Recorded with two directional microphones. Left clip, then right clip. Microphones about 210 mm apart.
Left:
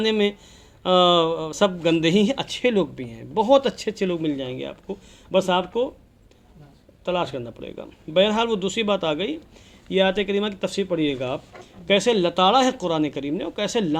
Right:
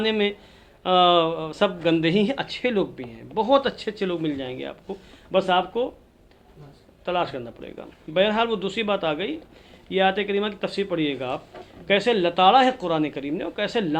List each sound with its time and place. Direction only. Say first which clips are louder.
0.0 s speech: left 2 dB; 40° left (ahead or behind)
7.0 s speech: even; 40° left (ahead or behind)